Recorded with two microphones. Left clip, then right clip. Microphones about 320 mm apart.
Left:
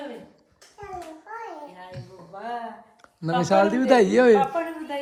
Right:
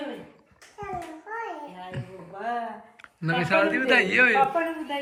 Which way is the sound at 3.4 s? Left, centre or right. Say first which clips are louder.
Left 3 dB; centre.